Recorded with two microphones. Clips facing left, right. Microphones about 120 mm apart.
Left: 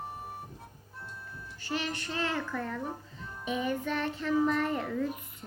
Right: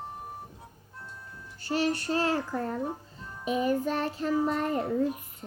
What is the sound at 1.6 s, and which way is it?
A child's voice, 40° right (ahead or behind).